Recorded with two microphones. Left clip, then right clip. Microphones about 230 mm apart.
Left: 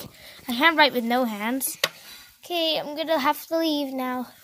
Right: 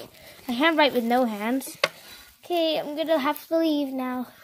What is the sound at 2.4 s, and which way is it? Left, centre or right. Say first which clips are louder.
Speech: right 1 dB; left.